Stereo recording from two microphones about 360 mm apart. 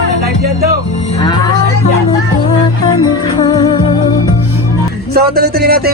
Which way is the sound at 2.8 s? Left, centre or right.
Centre.